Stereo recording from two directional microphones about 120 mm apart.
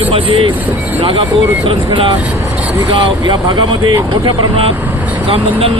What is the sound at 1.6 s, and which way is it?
Speech, 45° right (ahead or behind).